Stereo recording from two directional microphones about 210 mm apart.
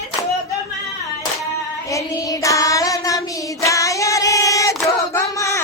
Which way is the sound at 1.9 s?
15° left (ahead or behind).